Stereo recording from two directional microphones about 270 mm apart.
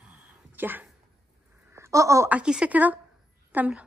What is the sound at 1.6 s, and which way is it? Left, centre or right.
A woman's voice, centre.